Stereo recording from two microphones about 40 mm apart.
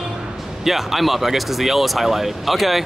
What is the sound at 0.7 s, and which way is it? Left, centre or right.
Speech, centre.